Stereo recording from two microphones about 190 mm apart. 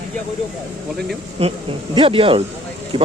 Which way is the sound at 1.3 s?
30° right (ahead or behind).